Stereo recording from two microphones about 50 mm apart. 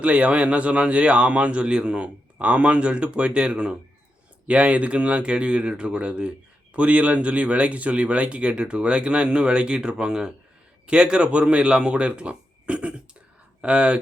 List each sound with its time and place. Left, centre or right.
0.0 s speech: right
2.4 s speech: right